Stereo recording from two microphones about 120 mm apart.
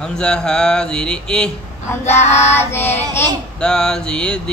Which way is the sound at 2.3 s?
20° left (ahead or behind).